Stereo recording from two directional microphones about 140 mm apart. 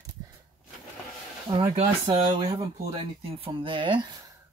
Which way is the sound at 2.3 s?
45° right (ahead or behind).